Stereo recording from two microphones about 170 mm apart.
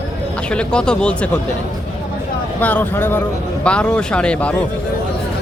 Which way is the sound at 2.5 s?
10° left (ahead or behind).